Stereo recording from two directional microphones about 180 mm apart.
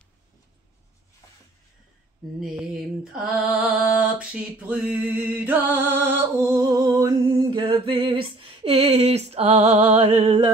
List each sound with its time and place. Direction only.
2.4 s music: 5° right (ahead or behind); by 10.5 s 30° right (ahead or behind)